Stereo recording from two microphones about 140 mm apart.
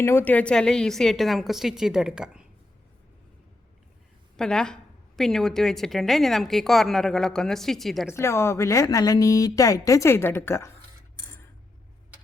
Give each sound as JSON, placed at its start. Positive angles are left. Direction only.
{"t": 0.0, "sound": "a woman's voice", "side_deg": 15}
{"t": 4.4, "sound": "a woman's voice", "side_deg": 5}
{"t": 8.1, "sound": "speech", "side_deg": 20}